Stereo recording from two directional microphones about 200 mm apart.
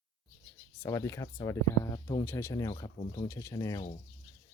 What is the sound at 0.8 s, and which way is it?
Speech, 15° left (ahead or behind).